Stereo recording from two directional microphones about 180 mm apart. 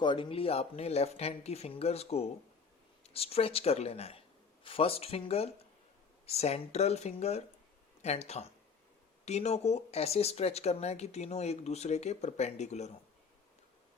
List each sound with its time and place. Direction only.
0.0 s speech: 25° left (ahead or behind)